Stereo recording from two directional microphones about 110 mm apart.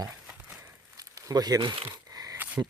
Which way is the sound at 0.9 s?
30° right (ahead or behind).